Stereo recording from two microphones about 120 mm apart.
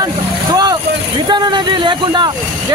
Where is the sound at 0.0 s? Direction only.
35° right (ahead or behind).